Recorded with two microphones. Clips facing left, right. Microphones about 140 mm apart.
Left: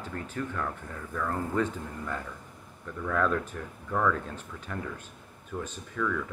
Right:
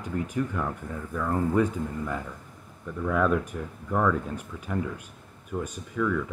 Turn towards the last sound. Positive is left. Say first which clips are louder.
# right 4 dB
turn(degrees=-10)  # may be behind; listen again after turning